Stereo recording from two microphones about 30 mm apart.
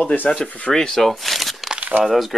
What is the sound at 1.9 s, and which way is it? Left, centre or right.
Speech, right.